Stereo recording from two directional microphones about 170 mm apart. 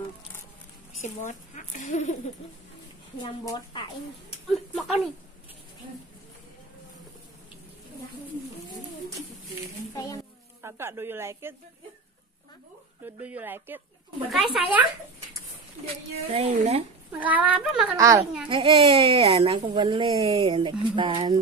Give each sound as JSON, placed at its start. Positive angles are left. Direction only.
{"t": 1.0, "sound": "speech", "side_deg": 45}
{"t": 3.2, "sound": "a woman's voice", "side_deg": 25}
{"t": 4.5, "sound": "speech", "side_deg": 0}
{"t": 10.6, "sound": "speech", "side_deg": -15}
{"t": 13.0, "sound": "speech", "side_deg": -10}
{"t": 15.8, "sound": "speech", "side_deg": -35}
{"t": 17.1, "sound": "speech", "side_deg": -10}
{"t": 17.9, "sound": "speech", "side_deg": -20}
{"t": 18.5, "sound": "speech", "side_deg": -30}